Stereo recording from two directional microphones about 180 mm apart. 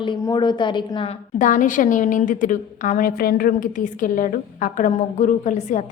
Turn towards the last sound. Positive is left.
turn(degrees=45)  # may be behind; listen again after turning